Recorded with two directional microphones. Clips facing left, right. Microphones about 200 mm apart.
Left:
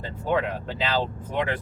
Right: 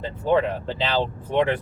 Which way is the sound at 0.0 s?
30° right (ahead or behind).